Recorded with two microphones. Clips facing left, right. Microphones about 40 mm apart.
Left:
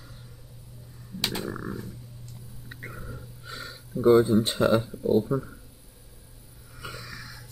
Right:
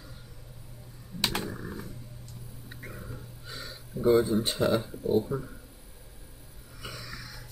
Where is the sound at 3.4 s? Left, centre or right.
Centre.